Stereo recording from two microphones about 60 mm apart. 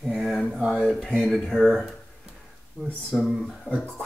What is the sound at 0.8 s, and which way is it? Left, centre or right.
Speech, centre.